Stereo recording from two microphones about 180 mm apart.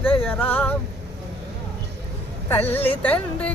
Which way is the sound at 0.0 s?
10° left (ahead or behind).